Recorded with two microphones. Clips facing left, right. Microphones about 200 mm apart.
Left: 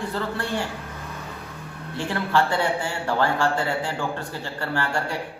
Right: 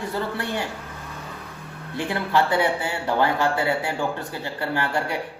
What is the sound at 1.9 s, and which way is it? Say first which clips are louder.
Speech: right 1 dB; 15° right (ahead or behind).